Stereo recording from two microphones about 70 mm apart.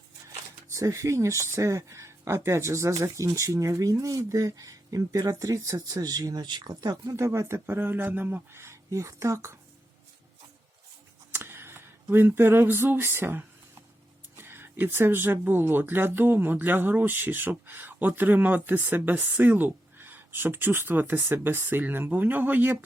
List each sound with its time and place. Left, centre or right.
0.7 s speech: right
7.1 s speech: right
7.8 s speech: right
8.9 s speech: right
11.3 s a sound: right
12.0 s speech: right